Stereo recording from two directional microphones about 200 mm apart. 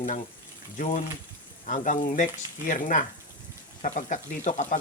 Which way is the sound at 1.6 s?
40° left (ahead or behind).